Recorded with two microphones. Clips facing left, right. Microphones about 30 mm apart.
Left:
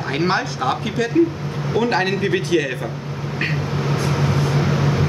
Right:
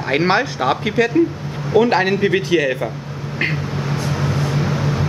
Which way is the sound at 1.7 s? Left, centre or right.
Centre.